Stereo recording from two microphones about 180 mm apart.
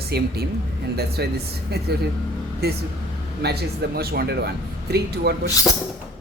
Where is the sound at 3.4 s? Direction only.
60° right (ahead or behind).